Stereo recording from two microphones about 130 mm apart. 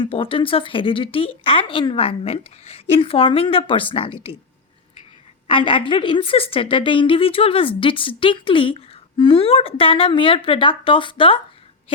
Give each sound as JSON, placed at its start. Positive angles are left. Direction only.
{"t": 0.0, "sound": "a woman's voice", "side_deg": 45}
{"t": 5.5, "sound": "a woman's voice", "side_deg": 45}